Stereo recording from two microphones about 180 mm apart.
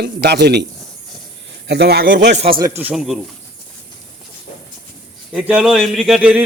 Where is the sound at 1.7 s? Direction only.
65° right (ahead or behind).